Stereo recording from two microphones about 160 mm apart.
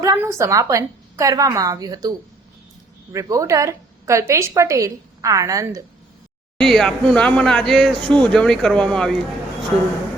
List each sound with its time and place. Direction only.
0.0 s a woman's voice: 20° right (ahead or behind)
6.6 s speech: centre (ahead or behind)